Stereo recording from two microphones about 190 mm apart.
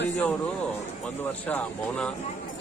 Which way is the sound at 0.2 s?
10° left (ahead or behind).